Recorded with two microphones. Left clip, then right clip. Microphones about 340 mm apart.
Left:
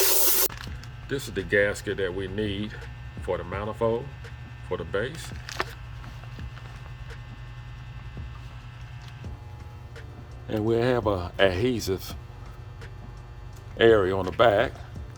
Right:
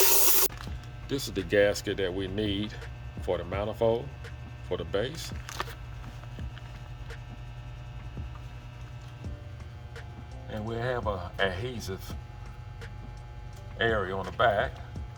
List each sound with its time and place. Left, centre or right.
0.0 s music: centre
1.0 s speech: centre
10.5 s speech: left
13.7 s speech: left